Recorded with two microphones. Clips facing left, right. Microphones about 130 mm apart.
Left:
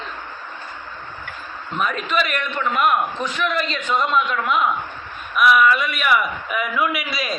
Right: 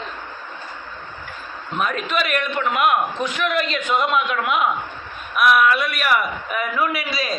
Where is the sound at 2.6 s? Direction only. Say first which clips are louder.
Even; 10° right (ahead or behind).